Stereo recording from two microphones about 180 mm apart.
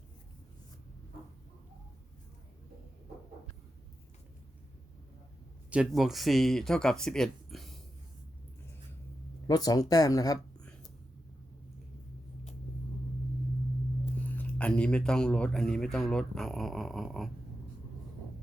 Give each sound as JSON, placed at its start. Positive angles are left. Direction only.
{"t": 5.7, "sound": "speech", "side_deg": -5}
{"t": 9.5, "sound": "speech", "side_deg": 20}
{"t": 14.3, "sound": "speech", "side_deg": 10}